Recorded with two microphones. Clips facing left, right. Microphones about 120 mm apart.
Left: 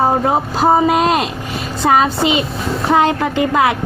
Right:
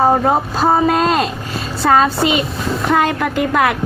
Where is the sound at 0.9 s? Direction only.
15° left (ahead or behind).